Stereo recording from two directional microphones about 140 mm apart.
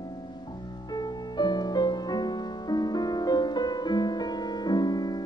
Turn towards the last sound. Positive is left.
turn(degrees=30)  # may be behind; listen again after turning